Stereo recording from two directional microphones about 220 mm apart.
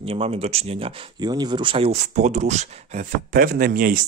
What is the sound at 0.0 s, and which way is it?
Speech, 25° right (ahead or behind).